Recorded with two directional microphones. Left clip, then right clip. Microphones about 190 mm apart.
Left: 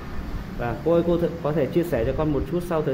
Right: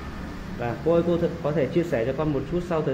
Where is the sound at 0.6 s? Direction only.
15° left (ahead or behind).